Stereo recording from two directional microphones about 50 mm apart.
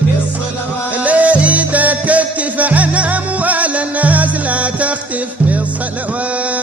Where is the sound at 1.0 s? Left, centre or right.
Right.